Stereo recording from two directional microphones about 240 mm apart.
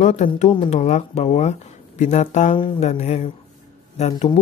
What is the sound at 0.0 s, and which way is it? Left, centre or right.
Speech, left.